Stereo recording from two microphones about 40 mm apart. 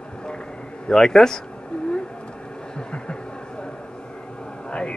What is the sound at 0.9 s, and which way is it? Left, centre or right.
Speech, centre.